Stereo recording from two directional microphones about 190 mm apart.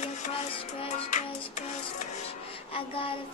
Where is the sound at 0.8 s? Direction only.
40° left (ahead or behind).